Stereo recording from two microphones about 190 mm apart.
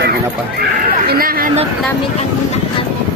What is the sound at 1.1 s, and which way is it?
Speech, 50° right (ahead or behind).